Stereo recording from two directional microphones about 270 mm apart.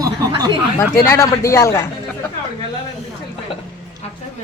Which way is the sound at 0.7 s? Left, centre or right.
Centre.